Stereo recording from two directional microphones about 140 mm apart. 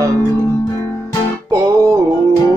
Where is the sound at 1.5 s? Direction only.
20° right (ahead or behind).